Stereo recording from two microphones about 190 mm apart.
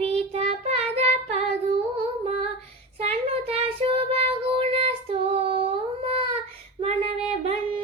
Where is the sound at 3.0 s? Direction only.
30° right (ahead or behind).